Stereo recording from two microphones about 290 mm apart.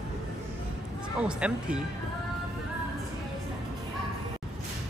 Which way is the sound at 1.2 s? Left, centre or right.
Centre.